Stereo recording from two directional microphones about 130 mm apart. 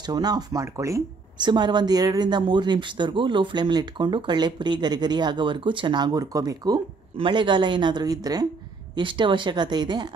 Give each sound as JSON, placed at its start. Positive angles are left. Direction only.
{"t": 0.0, "sound": "speech", "side_deg": -30}
{"t": 1.4, "sound": "speech", "side_deg": -35}